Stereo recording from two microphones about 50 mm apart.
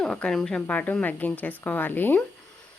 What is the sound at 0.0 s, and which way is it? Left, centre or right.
Speech, centre.